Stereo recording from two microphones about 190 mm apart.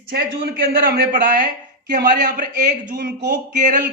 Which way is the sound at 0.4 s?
50° right (ahead or behind).